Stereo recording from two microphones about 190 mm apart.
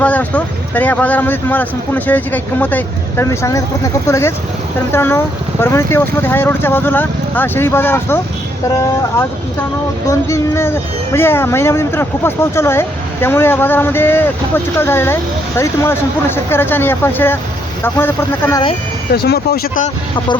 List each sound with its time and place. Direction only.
0.0 s speech: 10° left (ahead or behind)
10.1 s speech: 15° left (ahead or behind)
19.1 s speech: 55° left (ahead or behind)